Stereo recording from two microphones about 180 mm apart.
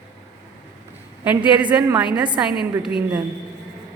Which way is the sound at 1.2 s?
10° right (ahead or behind).